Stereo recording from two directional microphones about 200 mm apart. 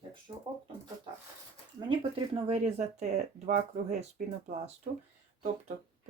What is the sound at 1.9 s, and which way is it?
Speech, 25° right (ahead or behind).